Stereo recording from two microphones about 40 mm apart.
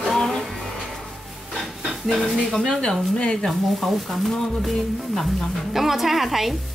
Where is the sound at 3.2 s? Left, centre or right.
Left.